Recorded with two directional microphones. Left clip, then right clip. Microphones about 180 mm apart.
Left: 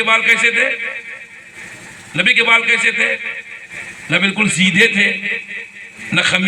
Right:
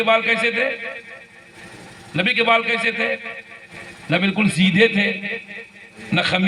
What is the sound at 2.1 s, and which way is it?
A man's voice, 35° right (ahead or behind).